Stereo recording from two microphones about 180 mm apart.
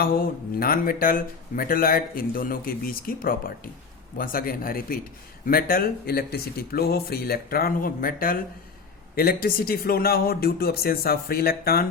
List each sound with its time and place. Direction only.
0.0 s speech: 55° left (ahead or behind)